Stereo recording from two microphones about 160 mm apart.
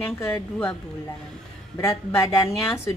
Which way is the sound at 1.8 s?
15° left (ahead or behind).